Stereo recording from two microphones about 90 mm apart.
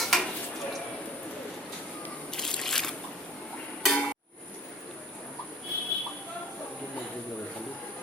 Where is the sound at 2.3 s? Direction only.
5° left (ahead or behind).